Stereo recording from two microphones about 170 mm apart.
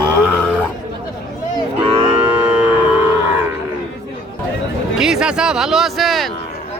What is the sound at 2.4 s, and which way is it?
Music, 10° right (ahead or behind).